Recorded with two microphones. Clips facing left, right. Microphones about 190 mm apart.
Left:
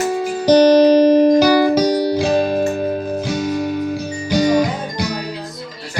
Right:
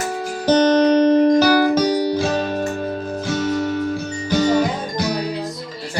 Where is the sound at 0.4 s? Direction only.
10° left (ahead or behind).